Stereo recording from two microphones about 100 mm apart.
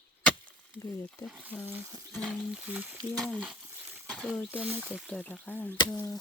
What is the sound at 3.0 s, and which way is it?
Speech, 5° left (ahead or behind).